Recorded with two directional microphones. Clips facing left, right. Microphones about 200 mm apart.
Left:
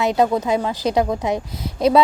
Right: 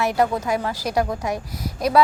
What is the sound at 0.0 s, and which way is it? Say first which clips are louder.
A woman's voice: left 3 dB; 20° left (ahead or behind).